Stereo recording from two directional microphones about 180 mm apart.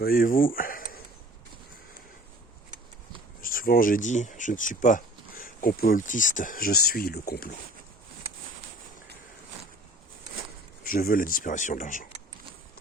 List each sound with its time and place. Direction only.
0.0 s speech: 55° left (ahead or behind)
3.4 s speech: 50° left (ahead or behind)
10.8 s speech: 50° left (ahead or behind)